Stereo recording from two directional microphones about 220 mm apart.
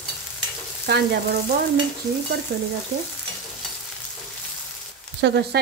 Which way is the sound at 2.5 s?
55° right (ahead or behind).